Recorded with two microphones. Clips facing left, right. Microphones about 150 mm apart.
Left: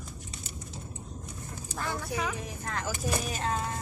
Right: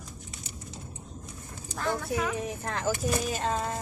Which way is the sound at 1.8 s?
Centre (ahead or behind).